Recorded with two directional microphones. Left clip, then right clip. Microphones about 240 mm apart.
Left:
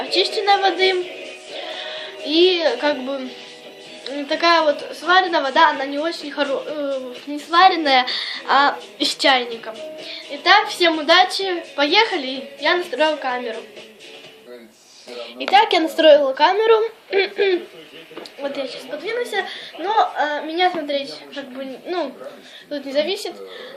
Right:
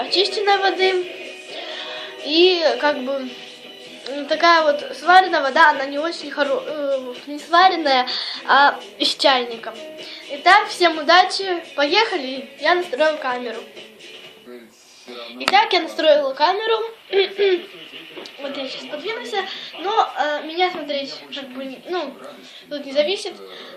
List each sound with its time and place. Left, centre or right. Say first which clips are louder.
0.0 s a woman's voice: even; centre
15.4 s speech: left 1 dB; left
20.0 s speech: left 1 dB; left
22.7 s speech: right 1 dB; left